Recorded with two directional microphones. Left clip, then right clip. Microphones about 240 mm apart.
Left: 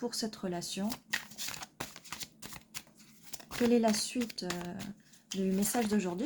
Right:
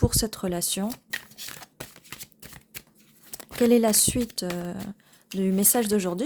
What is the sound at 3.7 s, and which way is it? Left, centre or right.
A woman's voice, right.